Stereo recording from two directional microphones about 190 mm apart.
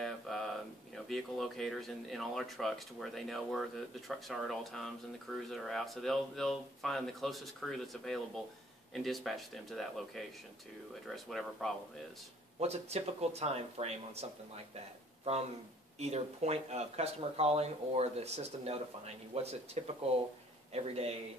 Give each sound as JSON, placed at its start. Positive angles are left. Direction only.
{"t": 0.0, "sound": "a sound", "side_deg": 0}
{"t": 1.0, "sound": "speech", "side_deg": 0}
{"t": 12.5, "sound": "speech", "side_deg": -35}
{"t": 16.0, "sound": "speech", "side_deg": -35}